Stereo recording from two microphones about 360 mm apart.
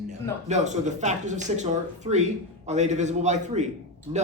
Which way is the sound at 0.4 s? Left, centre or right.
Centre.